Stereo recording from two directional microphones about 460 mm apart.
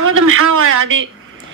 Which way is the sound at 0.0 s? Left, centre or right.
Right.